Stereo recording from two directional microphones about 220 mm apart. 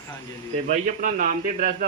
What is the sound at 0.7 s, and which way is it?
A man's voice, 40° right (ahead or behind).